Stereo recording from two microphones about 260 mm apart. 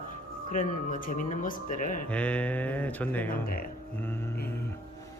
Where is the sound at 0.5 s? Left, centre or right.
Left.